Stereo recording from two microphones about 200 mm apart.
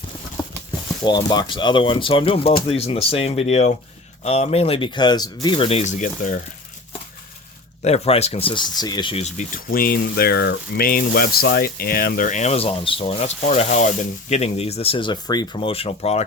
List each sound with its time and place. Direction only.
0.4 s a sound: 20° left (ahead or behind)
1.0 s speech: 20° left (ahead or behind); by 6.4 s 40° left (ahead or behind)
7.8 s speech: 30° left (ahead or behind)